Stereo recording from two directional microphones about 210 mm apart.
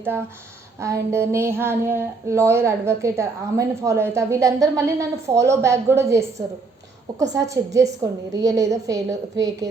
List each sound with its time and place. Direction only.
0.0 s speech: 10° right (ahead or behind)